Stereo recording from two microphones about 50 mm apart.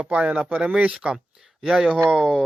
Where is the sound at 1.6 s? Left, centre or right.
Centre.